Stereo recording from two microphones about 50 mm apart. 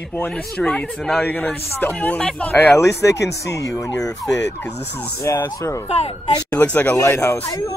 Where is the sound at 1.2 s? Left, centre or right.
Left.